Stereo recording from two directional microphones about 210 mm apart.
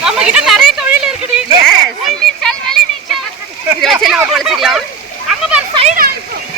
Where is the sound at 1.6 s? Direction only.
Centre (ahead or behind).